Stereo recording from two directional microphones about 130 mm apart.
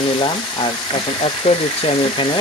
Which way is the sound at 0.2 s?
40° left (ahead or behind).